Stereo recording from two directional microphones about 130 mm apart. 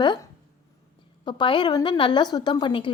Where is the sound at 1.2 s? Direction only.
40° left (ahead or behind).